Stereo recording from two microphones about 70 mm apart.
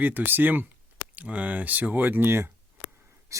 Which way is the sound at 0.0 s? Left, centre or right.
Right.